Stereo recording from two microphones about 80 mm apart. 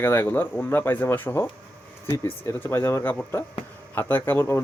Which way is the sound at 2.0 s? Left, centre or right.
Left.